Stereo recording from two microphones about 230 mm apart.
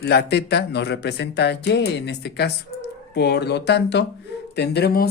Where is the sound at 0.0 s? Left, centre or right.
Left.